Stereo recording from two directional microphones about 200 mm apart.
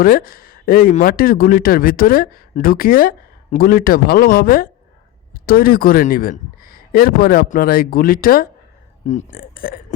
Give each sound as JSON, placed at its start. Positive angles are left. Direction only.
{"t": 0.0, "sound": "speech", "side_deg": 45}